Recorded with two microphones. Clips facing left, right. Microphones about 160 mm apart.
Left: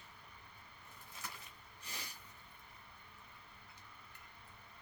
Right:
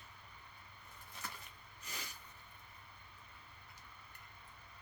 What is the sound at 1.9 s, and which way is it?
Snort, 30° left (ahead or behind).